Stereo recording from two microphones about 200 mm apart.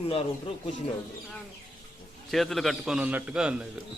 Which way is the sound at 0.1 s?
25° left (ahead or behind).